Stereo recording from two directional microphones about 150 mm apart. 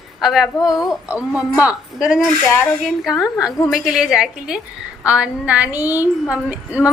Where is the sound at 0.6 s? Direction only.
25° left (ahead or behind).